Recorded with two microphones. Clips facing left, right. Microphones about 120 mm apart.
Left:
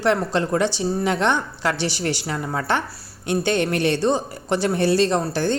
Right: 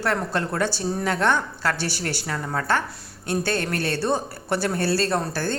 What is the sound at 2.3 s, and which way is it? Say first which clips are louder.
Speech: right 2 dB; 15° left (ahead or behind).